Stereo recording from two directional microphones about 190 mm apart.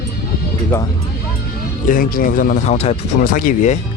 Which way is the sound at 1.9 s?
50° left (ahead or behind).